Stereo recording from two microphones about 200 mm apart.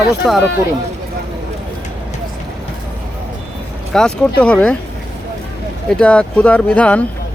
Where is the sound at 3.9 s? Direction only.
5° left (ahead or behind).